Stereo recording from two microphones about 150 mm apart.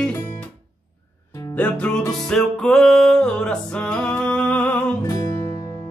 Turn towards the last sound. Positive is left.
turn(degrees=20)  # may be behind; listen again after turning